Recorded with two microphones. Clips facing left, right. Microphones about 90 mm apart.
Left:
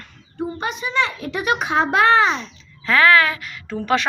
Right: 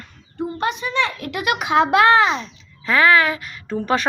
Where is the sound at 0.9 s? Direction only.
65° right (ahead or behind).